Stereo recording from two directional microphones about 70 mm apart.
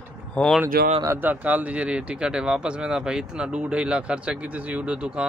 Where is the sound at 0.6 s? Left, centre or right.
Right.